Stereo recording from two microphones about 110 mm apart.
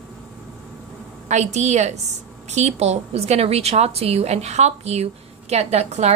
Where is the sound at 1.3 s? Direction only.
90° right.